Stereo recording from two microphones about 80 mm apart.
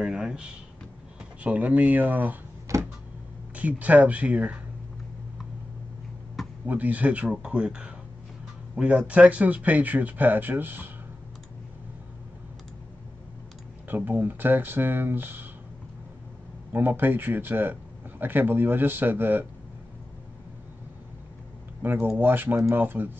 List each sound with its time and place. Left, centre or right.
0.0 s a sound: centre
1.4 s speech: centre
2.7 s a sound: right
3.5 s speech: centre
6.6 s speech: right
13.8 s speech: right
16.7 s speech: right
21.8 s speech: right